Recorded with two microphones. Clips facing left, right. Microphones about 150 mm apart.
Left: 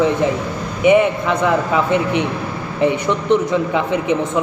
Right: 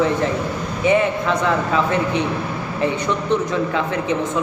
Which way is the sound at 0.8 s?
15° left (ahead or behind).